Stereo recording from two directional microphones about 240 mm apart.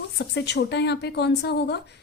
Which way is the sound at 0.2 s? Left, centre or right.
Left.